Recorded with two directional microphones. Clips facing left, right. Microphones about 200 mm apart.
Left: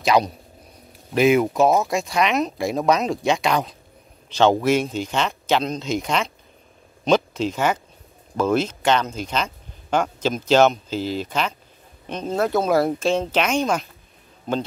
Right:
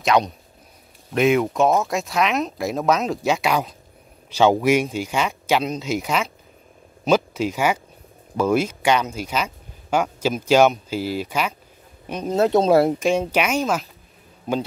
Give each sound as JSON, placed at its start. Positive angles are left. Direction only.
{"t": 0.0, "sound": "speech", "side_deg": 0}
{"t": 12.4, "sound": "speech", "side_deg": -25}
{"t": 13.0, "sound": "speech", "side_deg": -10}